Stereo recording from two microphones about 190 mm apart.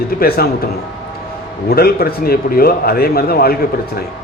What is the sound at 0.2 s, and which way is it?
Speech, 55° left (ahead or behind).